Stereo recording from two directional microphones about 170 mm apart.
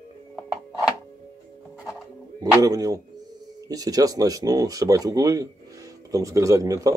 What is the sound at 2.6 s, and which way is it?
Speech, 20° right (ahead or behind).